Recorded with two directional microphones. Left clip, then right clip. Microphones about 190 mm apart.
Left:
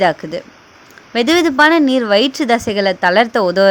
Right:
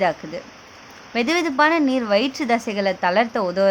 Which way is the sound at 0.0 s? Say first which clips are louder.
Left 7 dB; 30° left (ahead or behind).